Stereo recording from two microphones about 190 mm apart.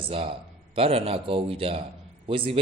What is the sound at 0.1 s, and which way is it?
Speech, 30° right (ahead or behind).